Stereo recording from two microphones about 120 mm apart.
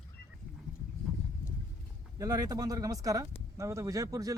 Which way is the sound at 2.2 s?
30° right (ahead or behind).